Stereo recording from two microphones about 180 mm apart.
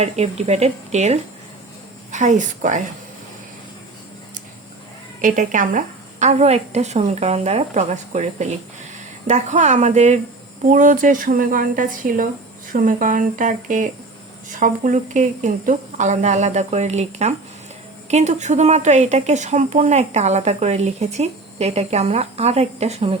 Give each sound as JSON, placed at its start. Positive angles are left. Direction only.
{"t": 0.0, "sound": "a woman's voice", "side_deg": -35}
{"t": 5.2, "sound": "a woman's voice", "side_deg": -45}